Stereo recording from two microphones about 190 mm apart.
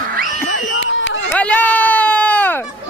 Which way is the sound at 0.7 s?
75° left (ahead or behind).